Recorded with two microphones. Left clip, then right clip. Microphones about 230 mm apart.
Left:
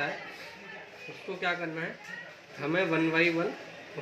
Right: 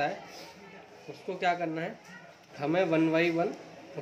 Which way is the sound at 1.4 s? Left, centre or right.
Centre.